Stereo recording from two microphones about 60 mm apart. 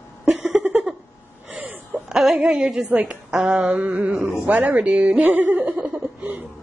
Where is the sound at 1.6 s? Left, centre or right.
Right.